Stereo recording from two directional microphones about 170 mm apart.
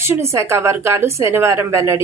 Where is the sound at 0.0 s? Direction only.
15° right (ahead or behind).